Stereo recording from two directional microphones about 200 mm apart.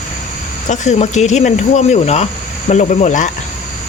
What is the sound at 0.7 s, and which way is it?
Speech, 35° left (ahead or behind).